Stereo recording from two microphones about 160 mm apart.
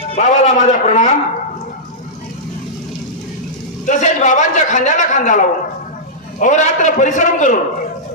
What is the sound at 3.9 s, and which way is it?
A man's voice, 50° left (ahead or behind).